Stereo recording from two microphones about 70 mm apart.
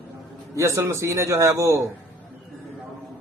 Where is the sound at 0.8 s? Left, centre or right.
Right.